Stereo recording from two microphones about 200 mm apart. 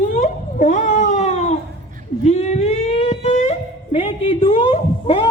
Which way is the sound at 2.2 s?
35° left (ahead or behind).